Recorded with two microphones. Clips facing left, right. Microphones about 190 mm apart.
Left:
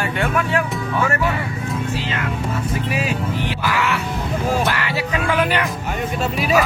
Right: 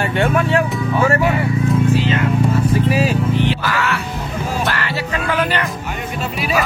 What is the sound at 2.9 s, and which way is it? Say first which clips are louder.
Vehicle: right 6 dB; 30° right (ahead or behind).